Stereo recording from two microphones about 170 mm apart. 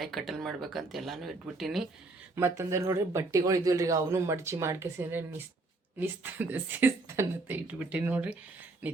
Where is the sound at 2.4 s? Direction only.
15° right (ahead or behind).